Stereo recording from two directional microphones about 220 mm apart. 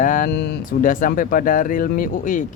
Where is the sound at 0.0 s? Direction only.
35° left (ahead or behind).